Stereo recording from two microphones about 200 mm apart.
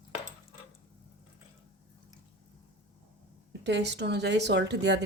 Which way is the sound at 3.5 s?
60° right (ahead or behind).